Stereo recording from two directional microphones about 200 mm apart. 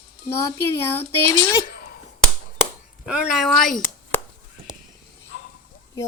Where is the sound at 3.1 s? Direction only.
5° right (ahead or behind).